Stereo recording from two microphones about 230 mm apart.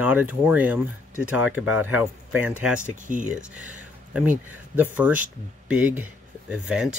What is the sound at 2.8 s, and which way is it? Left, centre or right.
Speech, right.